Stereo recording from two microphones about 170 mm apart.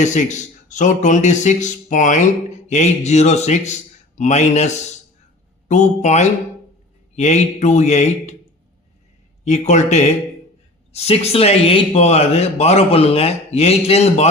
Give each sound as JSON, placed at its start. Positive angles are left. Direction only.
{"t": 0.0, "sound": "a man's voice", "side_deg": 45}
{"t": 9.4, "sound": "speech", "side_deg": 45}